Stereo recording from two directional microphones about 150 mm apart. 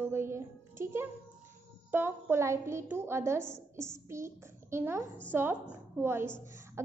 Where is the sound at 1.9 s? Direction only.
15° right (ahead or behind).